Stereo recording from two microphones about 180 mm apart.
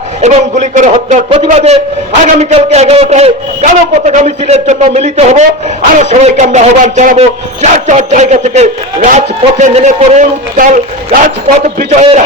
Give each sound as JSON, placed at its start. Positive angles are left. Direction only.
{"t": 0.2, "sound": "a man's voice", "side_deg": -40}